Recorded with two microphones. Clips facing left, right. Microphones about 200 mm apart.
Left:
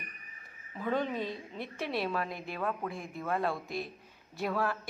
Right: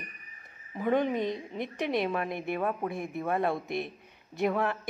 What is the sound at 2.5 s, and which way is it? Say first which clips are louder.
A woman's voice: right 4 dB; 20° right (ahead or behind).